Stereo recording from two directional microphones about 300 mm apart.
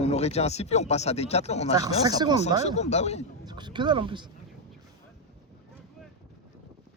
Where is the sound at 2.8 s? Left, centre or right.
Left.